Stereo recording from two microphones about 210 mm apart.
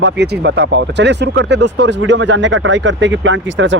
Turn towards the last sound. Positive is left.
turn(degrees=-60)  # may be behind; listen again after turning